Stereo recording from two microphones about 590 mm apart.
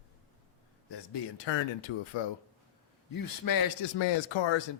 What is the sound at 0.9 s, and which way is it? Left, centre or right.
Speech, left.